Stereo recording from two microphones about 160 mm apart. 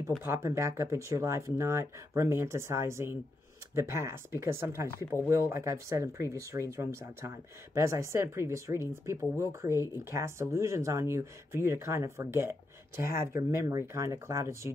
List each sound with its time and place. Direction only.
0.2 s speech: 15° right (ahead or behind)